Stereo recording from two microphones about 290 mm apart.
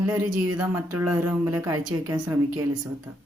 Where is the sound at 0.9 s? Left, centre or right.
Centre.